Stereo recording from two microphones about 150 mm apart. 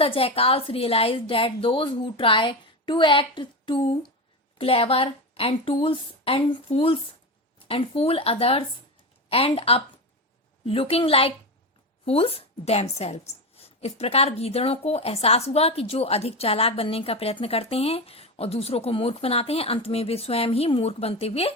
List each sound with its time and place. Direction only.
0.0 s a woman's voice: 40° left (ahead or behind)